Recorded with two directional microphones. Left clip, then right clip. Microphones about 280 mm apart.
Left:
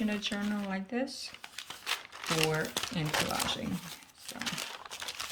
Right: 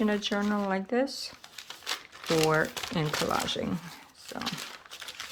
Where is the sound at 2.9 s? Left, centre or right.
Centre.